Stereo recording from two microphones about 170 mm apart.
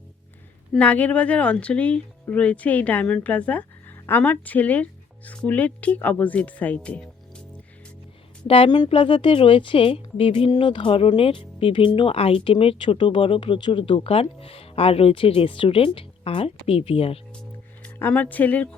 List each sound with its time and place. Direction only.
0.7 s a woman's voice: 5° left (ahead or behind)
8.4 s a woman's voice: 35° left (ahead or behind)
17.8 s speech: 10° left (ahead or behind)